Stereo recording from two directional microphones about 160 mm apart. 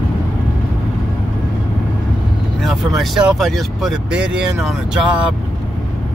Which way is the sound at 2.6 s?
Centre (ahead or behind).